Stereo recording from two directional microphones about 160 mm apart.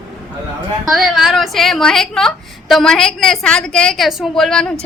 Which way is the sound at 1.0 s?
Centre (ahead or behind).